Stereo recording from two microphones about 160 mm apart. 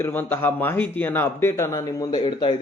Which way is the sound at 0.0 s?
15° left (ahead or behind).